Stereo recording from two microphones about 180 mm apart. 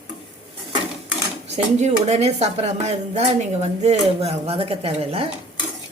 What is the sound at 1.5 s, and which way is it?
Speech, 40° right (ahead or behind).